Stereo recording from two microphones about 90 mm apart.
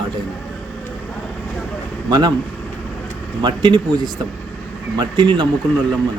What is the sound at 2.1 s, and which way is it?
Speech, 50° right (ahead or behind).